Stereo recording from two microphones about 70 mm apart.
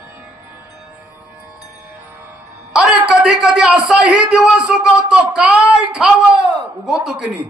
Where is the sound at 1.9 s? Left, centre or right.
Right.